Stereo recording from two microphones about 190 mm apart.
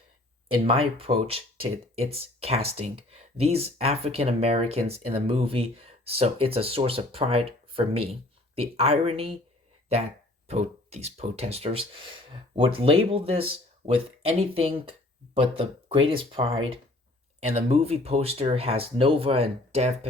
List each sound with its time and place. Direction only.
0.6 s speech: 30° right (ahead or behind)
10.4 s speech: 35° right (ahead or behind)